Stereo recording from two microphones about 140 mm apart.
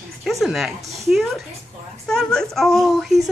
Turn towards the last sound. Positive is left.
turn(degrees=0)  # may be behind; listen again after turning